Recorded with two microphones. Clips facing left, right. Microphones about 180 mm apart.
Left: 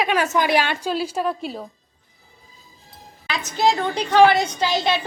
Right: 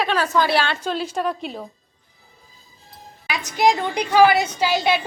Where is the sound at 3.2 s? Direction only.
15° right (ahead or behind).